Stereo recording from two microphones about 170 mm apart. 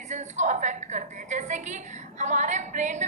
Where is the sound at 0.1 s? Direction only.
45° right (ahead or behind).